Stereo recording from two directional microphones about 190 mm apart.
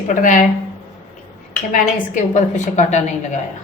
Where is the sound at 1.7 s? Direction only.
40° left (ahead or behind).